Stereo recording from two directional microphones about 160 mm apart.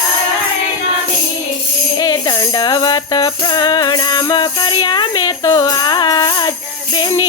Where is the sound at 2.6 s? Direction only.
25° left (ahead or behind).